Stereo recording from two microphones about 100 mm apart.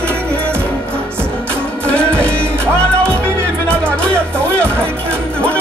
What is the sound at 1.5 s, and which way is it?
Music, 10° left (ahead or behind).